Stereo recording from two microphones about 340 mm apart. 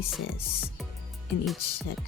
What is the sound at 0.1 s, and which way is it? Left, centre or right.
Speech, centre.